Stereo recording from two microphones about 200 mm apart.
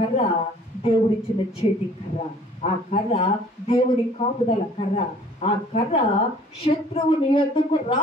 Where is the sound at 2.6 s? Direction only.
30° left (ahead or behind).